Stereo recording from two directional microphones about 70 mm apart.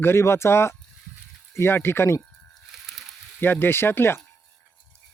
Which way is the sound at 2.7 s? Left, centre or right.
Centre.